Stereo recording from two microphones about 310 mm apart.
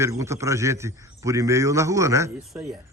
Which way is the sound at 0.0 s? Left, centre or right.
Centre.